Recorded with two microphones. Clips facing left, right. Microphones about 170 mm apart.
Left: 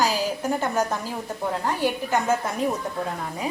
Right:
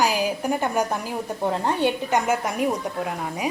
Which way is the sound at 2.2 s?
15° right (ahead or behind).